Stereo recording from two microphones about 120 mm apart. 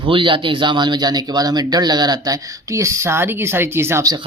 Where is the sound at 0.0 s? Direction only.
45° right (ahead or behind); by 4.1 s 20° right (ahead or behind).